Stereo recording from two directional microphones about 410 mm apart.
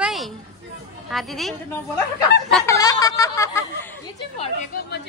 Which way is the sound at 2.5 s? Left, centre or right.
Centre.